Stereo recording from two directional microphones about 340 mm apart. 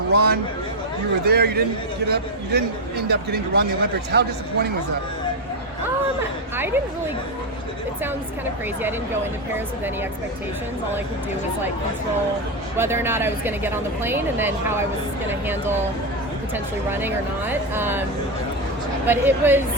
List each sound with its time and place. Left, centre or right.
0.1 s a man's voice: right
6.6 s speech: centre
12.7 s speech: centre
16.9 s speech: centre
19.0 s speech: centre